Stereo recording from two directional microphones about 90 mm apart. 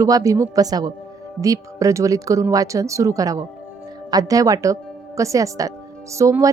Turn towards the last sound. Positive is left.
turn(degrees=-35)  # may be behind; listen again after turning